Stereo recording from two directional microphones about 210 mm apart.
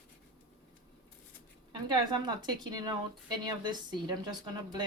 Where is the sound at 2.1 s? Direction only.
20° right (ahead or behind).